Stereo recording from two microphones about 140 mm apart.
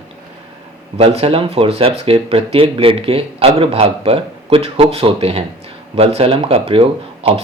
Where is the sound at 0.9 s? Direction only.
45° right (ahead or behind).